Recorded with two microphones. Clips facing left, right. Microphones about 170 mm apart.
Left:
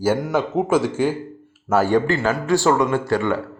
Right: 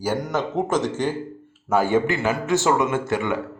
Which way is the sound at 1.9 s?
15° right (ahead or behind).